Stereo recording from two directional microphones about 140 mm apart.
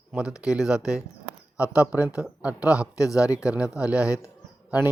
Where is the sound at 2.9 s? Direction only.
25° left (ahead or behind).